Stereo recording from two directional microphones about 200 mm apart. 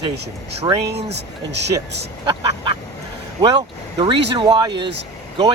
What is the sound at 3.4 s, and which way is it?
Speech, 20° right (ahead or behind).